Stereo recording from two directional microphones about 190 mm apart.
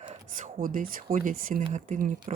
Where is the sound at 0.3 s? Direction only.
45° right (ahead or behind).